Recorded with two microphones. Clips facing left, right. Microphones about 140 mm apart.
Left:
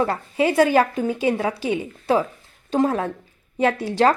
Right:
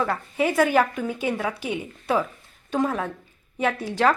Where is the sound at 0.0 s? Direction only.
30° left (ahead or behind).